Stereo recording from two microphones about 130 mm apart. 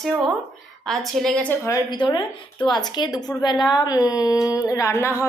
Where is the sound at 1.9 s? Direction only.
35° left (ahead or behind).